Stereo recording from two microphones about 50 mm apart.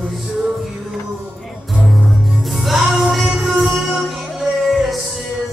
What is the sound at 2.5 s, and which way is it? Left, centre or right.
Music, centre.